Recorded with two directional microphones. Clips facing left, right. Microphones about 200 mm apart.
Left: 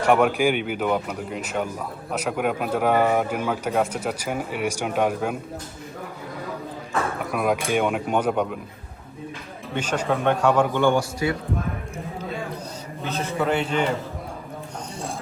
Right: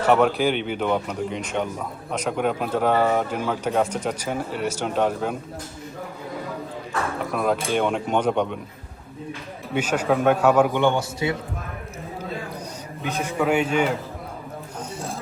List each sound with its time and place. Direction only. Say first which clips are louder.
0.0 s speech: even; 10° left (ahead or behind)
7.3 s speech: right 1 dB; 10° left (ahead or behind)
9.7 s a man's voice: right 3 dB; 10° right (ahead or behind)
10.7 s a man's voice: left 1 dB; 20° right (ahead or behind)
13.1 s a man's voice: right 1 dB; 10° right (ahead or behind)